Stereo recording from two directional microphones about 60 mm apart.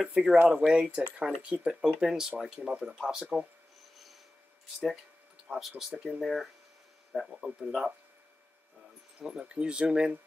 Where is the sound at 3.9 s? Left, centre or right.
Centre.